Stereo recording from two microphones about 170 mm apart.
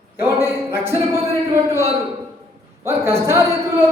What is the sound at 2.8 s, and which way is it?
Speech, 15° right (ahead or behind).